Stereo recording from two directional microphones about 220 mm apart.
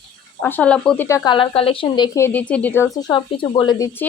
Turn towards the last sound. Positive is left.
turn(degrees=15)  # may be behind; listen again after turning